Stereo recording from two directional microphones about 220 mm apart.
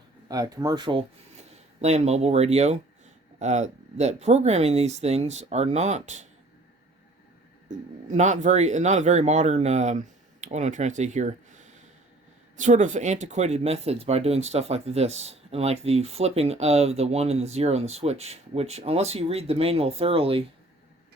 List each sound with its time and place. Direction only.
0.3 s speech: 15° right (ahead or behind); by 6.2 s 30° right (ahead or behind)
8.1 s speech: 35° right (ahead or behind)